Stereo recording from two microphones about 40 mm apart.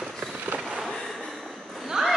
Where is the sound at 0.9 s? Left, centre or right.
Centre.